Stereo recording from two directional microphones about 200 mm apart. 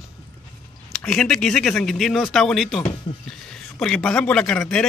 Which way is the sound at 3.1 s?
40° left (ahead or behind).